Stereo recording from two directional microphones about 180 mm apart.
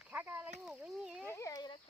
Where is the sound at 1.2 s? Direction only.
15° left (ahead or behind).